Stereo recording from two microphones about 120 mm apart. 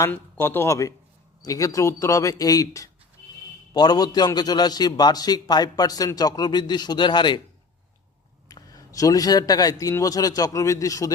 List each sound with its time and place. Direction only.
0.0 s a man's voice: 20° left (ahead or behind); by 7.4 s 40° left (ahead or behind)
8.4 s a man's voice: 30° left (ahead or behind)